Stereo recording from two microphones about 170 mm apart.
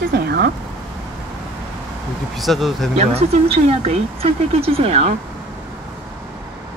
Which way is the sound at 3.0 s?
40° right (ahead or behind).